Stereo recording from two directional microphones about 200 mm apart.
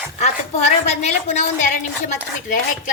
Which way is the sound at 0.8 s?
35° left (ahead or behind).